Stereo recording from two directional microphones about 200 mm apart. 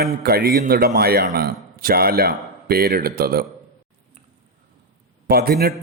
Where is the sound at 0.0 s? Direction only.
50° right (ahead or behind).